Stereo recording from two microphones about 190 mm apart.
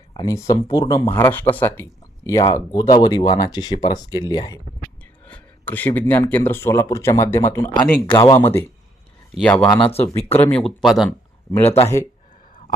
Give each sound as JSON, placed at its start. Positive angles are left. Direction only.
{"t": 0.1, "sound": "speech", "side_deg": 20}
{"t": 5.2, "sound": "speech", "side_deg": 10}
{"t": 8.0, "sound": "speech", "side_deg": 25}
{"t": 9.3, "sound": "speech", "side_deg": 5}
{"t": 9.7, "sound": "speech", "side_deg": 30}
{"t": 10.5, "sound": "speech", "side_deg": 0}